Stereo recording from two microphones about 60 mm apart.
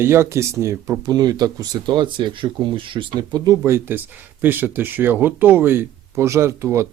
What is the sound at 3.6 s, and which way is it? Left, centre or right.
Speech, right.